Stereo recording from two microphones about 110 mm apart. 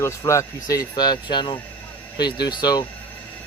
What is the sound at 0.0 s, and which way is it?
Speech, 25° left (ahead or behind).